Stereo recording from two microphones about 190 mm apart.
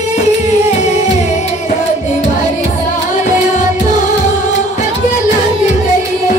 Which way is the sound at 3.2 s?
40° left (ahead or behind).